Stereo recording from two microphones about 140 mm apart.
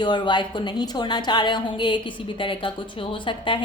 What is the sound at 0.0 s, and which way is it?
A woman's voice, 35° left (ahead or behind).